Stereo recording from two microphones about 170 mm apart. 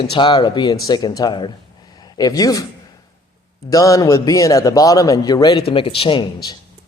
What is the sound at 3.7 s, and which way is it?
A man's voice, 20° left (ahead or behind).